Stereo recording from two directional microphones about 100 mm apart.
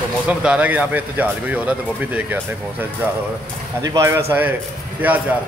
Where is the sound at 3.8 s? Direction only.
35° right (ahead or behind).